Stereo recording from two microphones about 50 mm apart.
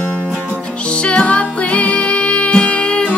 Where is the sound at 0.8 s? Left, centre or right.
Left.